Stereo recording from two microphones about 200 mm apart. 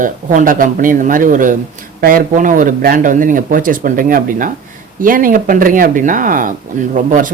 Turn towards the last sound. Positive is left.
turn(degrees=-40)  # may be behind; listen again after turning